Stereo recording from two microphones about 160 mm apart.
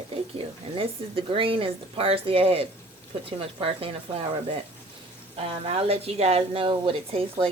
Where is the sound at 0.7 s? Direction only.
35° right (ahead or behind).